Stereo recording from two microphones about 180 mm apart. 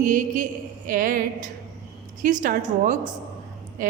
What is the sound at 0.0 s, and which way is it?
A woman's voice, 50° right (ahead or behind).